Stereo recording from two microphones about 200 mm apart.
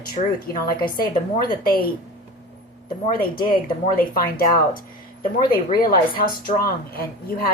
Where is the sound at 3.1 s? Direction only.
45° left (ahead or behind).